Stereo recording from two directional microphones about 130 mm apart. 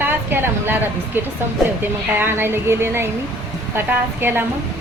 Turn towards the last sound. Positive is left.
turn(degrees=-15)  # may be behind; listen again after turning